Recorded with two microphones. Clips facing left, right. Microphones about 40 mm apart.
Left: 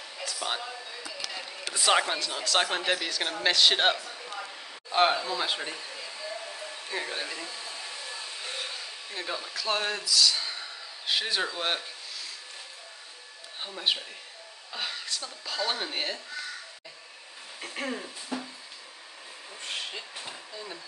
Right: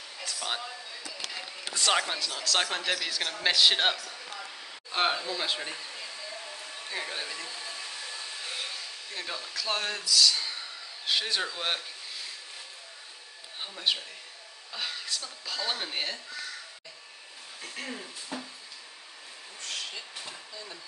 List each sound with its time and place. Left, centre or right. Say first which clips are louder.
0.2 s a woman's voice: left 1 dB; centre
4.9 s speech: left 4 dB; centre
6.2 s a sound: left 3 dB; centre
6.9 s speech: left 2 dB; centre
13.6 s a woman's voice: left 1 dB; centre
17.8 s speech: left 4 dB; centre
19.6 s a sound: left 2 dB; left